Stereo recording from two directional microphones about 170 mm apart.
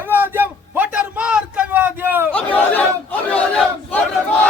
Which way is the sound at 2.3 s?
10° left (ahead or behind).